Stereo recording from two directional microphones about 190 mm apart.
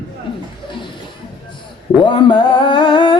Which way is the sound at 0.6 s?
25° left (ahead or behind).